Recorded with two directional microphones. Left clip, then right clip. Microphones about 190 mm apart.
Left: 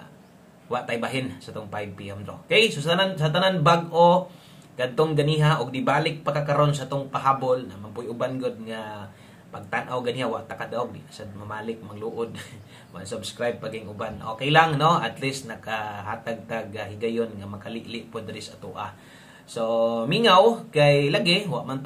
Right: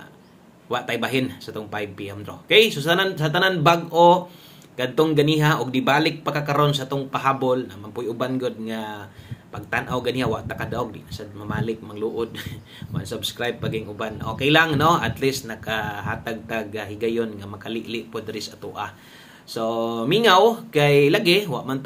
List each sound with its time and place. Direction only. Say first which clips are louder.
0.7 s a man's voice: right 3 dB; 35° right (ahead or behind)